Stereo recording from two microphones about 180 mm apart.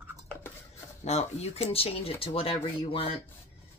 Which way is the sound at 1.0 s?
35° left (ahead or behind).